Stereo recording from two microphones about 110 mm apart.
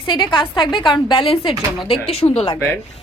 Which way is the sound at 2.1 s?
65° left (ahead or behind).